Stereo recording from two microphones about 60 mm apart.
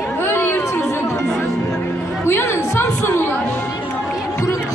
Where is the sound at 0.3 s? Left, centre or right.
Left.